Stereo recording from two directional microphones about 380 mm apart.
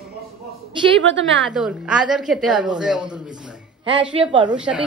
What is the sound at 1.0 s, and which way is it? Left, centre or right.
Speech, right.